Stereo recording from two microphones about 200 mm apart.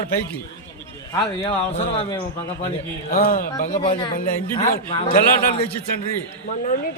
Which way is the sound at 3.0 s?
45° left (ahead or behind).